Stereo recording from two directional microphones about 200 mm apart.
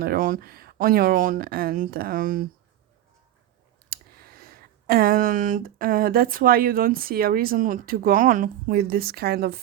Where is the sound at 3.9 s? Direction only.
50° right (ahead or behind).